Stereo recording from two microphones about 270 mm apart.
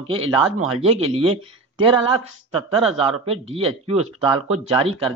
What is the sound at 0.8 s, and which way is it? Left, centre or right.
Speech, right.